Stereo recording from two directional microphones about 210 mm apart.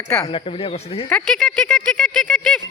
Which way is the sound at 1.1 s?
5° left (ahead or behind).